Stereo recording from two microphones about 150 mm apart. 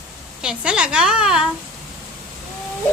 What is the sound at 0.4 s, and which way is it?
Speech, 5° right (ahead or behind).